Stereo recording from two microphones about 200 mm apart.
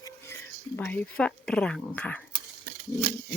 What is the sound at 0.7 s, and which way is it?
Speech, 10° left (ahead or behind).